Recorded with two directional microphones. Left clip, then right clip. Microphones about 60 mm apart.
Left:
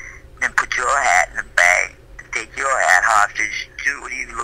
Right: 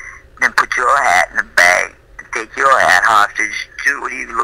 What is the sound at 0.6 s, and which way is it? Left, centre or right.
Radio, right.